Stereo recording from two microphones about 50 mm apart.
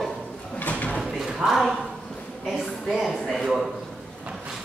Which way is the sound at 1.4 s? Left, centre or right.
Centre.